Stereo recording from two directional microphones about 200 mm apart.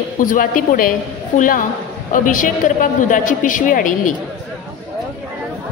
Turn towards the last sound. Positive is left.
turn(degrees=40)  # may be behind; listen again after turning